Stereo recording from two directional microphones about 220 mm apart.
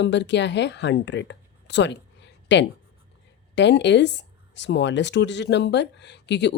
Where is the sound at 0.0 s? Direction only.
50° left (ahead or behind).